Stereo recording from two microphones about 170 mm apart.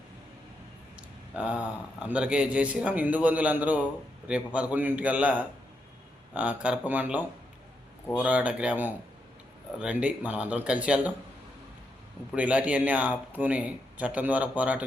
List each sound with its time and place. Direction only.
1.4 s a man's voice: 5° right (ahead or behind)
12.3 s a man's voice: 10° right (ahead or behind)